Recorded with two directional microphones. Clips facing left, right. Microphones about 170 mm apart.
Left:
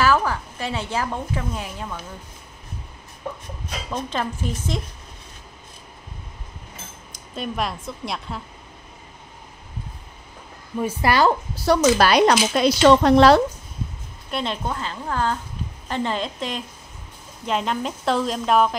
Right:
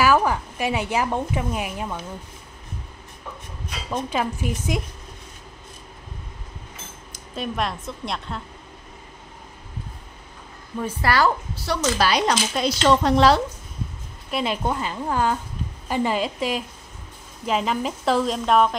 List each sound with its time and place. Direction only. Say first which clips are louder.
0.0 s a woman's voice: right 1 dB; 15° right (ahead or behind)
3.9 s speech: right 2 dB; 10° right (ahead or behind)
7.3 s speech: even; centre (ahead or behind)
10.8 s a woman's voice: left 2 dB; 15° left (ahead or behind)
11.5 s speech: left 8 dB; 45° left (ahead or behind)
12.0 s speech: left 5 dB; 60° left (ahead or behind)
14.3 s speech: right 2 dB; 10° right (ahead or behind)